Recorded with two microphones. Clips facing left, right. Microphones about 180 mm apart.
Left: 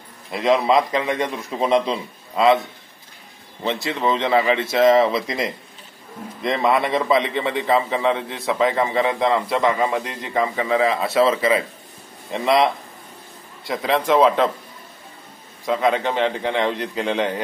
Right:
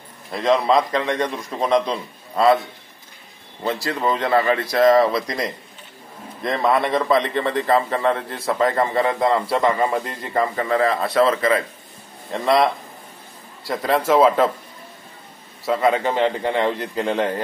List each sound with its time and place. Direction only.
0.3 s a man's voice: centre (ahead or behind)
3.7 s a man's voice: centre (ahead or behind)
15.6 s a man's voice: 5° right (ahead or behind)